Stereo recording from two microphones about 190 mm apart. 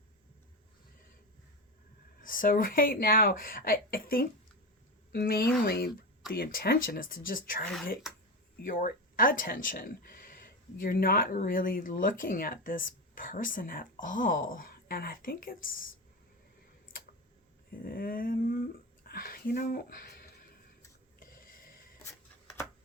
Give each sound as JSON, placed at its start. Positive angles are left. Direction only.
{"t": 2.2, "sound": "speech", "side_deg": 45}
{"t": 8.6, "sound": "speech", "side_deg": 50}
{"t": 17.8, "sound": "speech", "side_deg": 50}
{"t": 21.2, "sound": "a sound", "side_deg": 50}